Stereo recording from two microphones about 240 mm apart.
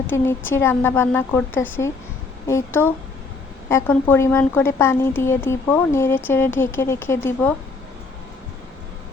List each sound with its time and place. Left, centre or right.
0.1 s a woman's voice: centre